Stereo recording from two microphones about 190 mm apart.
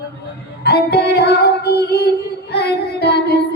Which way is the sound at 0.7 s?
60° left (ahead or behind).